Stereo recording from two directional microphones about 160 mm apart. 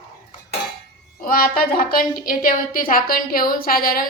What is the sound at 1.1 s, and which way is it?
A woman's voice, 65° left (ahead or behind).